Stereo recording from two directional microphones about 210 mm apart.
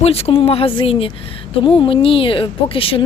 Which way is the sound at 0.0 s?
30° left (ahead or behind).